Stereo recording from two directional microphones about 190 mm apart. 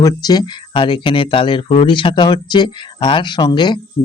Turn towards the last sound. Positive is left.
turn(degrees=20)  # may be behind; listen again after turning